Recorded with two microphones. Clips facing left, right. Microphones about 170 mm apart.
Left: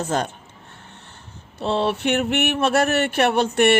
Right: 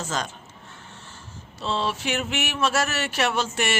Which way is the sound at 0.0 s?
60° left (ahead or behind).